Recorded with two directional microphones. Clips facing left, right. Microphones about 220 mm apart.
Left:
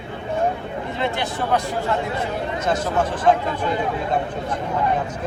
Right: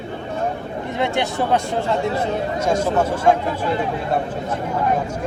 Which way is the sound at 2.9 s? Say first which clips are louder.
Even; 10° right (ahead or behind).